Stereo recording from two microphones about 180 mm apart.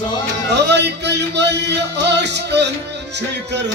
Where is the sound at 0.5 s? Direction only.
70° right (ahead or behind).